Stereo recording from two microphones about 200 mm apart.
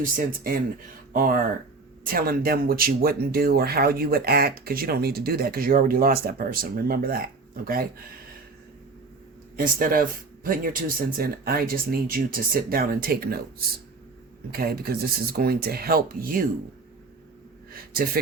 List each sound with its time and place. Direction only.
0.0 s speech: 45° right (ahead or behind)
9.6 s speech: 45° right (ahead or behind)
14.5 s speech: 50° right (ahead or behind)
17.7 s a sound: 50° right (ahead or behind)